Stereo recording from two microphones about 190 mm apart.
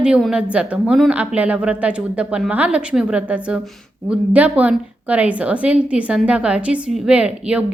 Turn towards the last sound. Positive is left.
turn(degrees=-5)  # may be behind; listen again after turning